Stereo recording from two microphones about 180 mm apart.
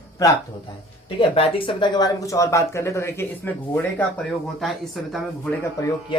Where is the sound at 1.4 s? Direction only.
30° left (ahead or behind); by 4.0 s 10° left (ahead or behind).